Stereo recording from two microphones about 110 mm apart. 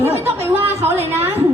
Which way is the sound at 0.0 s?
20° right (ahead or behind).